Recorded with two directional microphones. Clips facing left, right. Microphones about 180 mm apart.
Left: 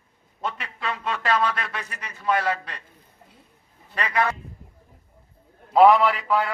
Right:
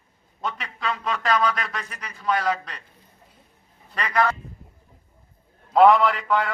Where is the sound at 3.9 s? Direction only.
5° left (ahead or behind).